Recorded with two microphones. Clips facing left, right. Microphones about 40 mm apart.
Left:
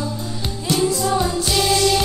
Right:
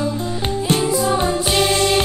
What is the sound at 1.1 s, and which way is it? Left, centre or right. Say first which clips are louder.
Music: right 2 dB; right.